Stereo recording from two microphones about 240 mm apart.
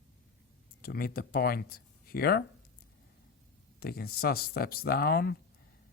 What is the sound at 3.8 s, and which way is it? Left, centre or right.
Speech, left.